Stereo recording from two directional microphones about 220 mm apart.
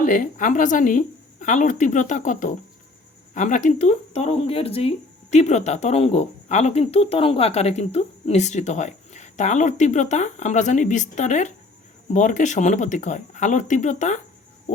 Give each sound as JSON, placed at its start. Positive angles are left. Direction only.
{"t": 0.0, "sound": "speech", "side_deg": 35}